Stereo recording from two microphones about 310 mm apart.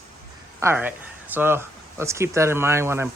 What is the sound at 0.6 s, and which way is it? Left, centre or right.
Speech, centre.